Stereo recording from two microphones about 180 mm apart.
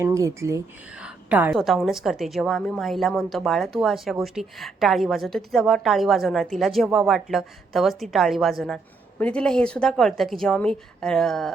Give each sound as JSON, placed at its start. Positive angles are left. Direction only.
{"t": 0.0, "sound": "speech", "side_deg": -15}
{"t": 0.9, "sound": "a sound", "side_deg": -5}
{"t": 1.5, "sound": "a woman's voice", "side_deg": 0}